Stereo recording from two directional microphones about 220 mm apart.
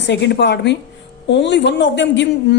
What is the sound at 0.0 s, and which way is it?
A woman's voice, 50° left (ahead or behind).